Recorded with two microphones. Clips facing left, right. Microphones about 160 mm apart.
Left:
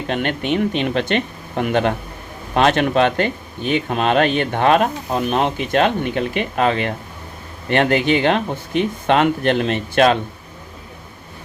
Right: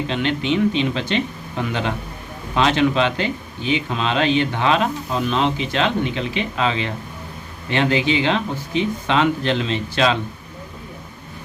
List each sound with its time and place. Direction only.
0.1 s speech: 55° left (ahead or behind)